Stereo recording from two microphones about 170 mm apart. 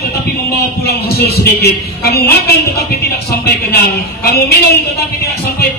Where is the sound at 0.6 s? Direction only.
70° left (ahead or behind).